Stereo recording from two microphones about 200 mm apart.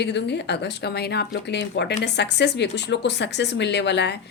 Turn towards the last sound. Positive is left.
turn(degrees=60)  # may be behind; listen again after turning